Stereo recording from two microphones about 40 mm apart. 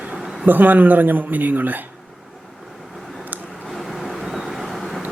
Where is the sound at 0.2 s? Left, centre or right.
Centre.